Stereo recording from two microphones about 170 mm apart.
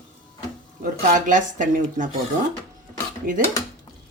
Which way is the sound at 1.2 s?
50° right (ahead or behind).